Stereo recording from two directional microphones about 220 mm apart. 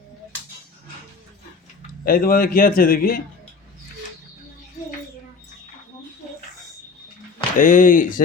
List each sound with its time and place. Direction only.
2.0 s a man's voice: 40° left (ahead or behind)
7.6 s a man's voice: 35° left (ahead or behind)